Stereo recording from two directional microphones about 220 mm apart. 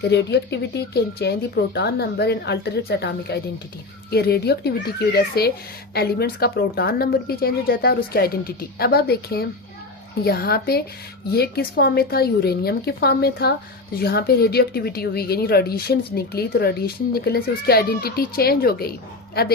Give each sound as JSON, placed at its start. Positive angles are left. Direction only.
{"t": 0.0, "sound": "speech", "side_deg": 50}